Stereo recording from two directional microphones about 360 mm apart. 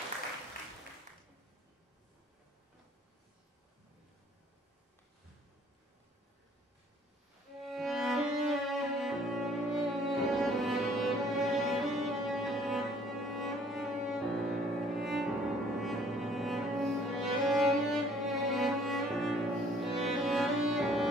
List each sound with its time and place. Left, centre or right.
7.6 s music: centre
15.8 s cello: centre
19.9 s music: centre